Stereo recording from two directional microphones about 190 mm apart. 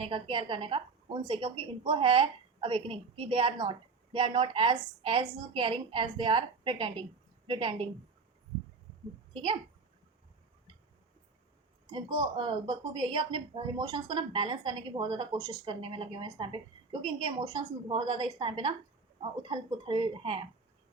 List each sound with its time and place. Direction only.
0.0 s a woman's voice: 25° right (ahead or behind)
9.3 s a woman's voice: 25° right (ahead or behind)
11.9 s a woman's voice: 25° right (ahead or behind)